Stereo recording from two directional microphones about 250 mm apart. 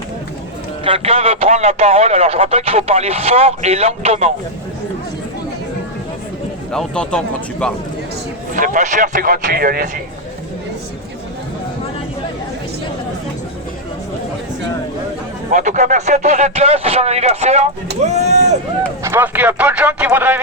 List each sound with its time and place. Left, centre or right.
0.9 s speech: right
6.7 s speech: centre
8.5 s a man's voice: right
15.4 s speech: right
19.0 s a man's voice: centre